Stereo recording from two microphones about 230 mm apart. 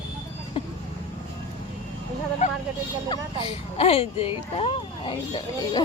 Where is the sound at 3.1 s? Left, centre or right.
Left.